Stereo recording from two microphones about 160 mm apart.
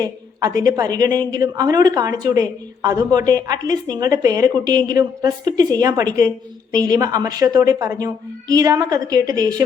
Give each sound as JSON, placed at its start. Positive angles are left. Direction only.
{"t": 0.0, "sound": "speech", "side_deg": -20}